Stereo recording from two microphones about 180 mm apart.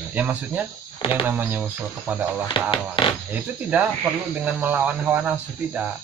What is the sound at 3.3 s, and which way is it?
Speech, 10° right (ahead or behind).